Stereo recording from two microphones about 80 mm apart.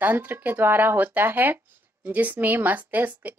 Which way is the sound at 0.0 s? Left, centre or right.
Right.